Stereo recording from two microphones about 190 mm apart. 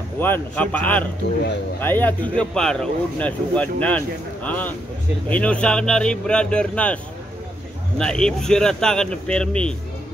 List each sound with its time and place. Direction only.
0.2 s speech: 10° left (ahead or behind)
8.0 s speech: 5° left (ahead or behind)